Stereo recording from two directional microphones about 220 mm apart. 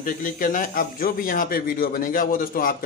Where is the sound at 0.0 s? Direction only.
40° left (ahead or behind).